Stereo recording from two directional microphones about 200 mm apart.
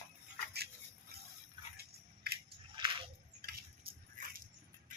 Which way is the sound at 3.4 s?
50° right (ahead or behind).